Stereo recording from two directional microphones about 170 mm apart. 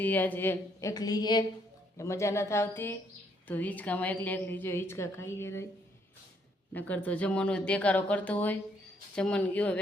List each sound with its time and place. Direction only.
0.0 s a woman's voice: 10° left (ahead or behind)
6.7 s a woman's voice: 10° left (ahead or behind)